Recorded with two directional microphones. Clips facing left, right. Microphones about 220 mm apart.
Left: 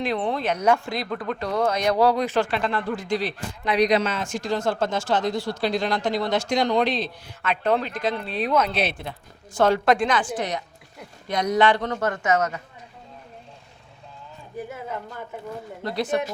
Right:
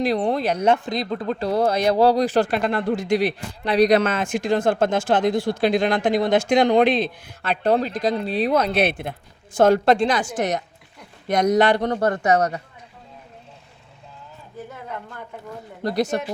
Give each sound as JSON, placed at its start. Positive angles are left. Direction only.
{"t": 0.0, "sound": "speech", "side_deg": -35}
{"t": 3.1, "sound": "speech", "side_deg": -65}
{"t": 3.6, "sound": "speech", "side_deg": -30}
{"t": 3.9, "sound": "speech", "side_deg": -55}
{"t": 7.4, "sound": "speech", "side_deg": -35}
{"t": 8.7, "sound": "speech", "side_deg": -55}
{"t": 9.8, "sound": "a woman's voice", "side_deg": -30}
{"t": 10.2, "sound": "speech", "side_deg": -45}
{"t": 14.7, "sound": "speech", "side_deg": 5}
{"t": 15.8, "sound": "speech", "side_deg": -40}